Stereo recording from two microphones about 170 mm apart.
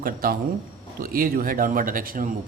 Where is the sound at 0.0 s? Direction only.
55° right (ahead or behind).